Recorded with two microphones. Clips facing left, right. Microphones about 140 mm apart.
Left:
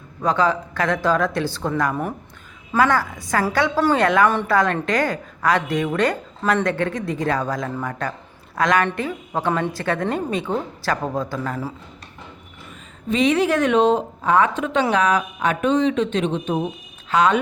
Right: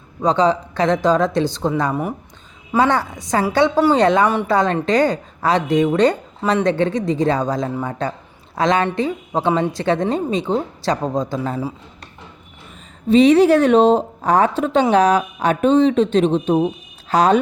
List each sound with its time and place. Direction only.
0.2 s a woman's voice: 25° right (ahead or behind)
2.7 s a woman's voice: 25° right (ahead or behind)
13.1 s a woman's voice: 35° right (ahead or behind)